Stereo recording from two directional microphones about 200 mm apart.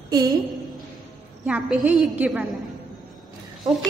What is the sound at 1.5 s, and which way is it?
A woman's voice, 5° right (ahead or behind).